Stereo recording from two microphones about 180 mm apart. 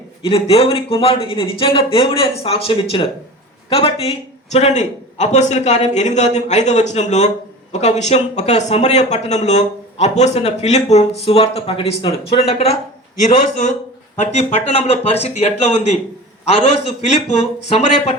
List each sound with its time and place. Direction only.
0.3 s speech: 30° left (ahead or behind)
14.2 s speech: 35° left (ahead or behind)
17.2 s speech: 35° left (ahead or behind)